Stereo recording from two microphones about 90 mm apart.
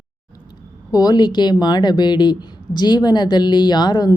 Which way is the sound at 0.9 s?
50° left (ahead or behind).